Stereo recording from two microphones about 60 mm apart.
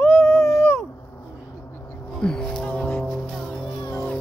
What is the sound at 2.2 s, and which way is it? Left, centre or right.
Music, centre.